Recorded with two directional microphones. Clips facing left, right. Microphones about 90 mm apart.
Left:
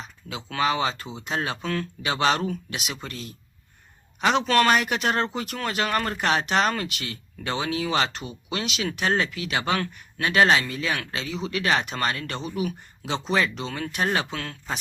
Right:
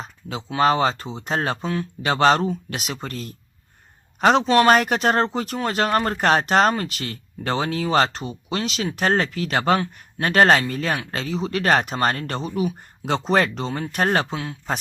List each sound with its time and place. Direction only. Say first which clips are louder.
0.0 s a sound: right 5 dB; 40° right (ahead or behind)
0.6 s speech: right 6 dB; 40° right (ahead or behind)
14.3 s speech: right 4 dB; 20° right (ahead or behind)